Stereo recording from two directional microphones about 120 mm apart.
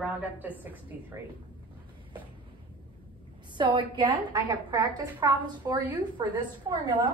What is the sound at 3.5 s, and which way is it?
A woman's voice, 40° right (ahead or behind).